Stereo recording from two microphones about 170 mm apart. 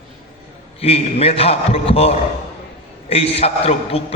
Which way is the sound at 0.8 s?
35° left (ahead or behind).